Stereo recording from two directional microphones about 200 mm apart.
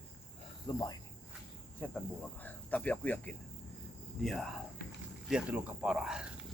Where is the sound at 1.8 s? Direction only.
10° left (ahead or behind).